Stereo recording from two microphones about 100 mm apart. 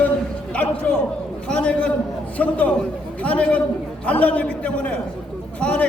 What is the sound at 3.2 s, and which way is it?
A man's voice, 15° left (ahead or behind).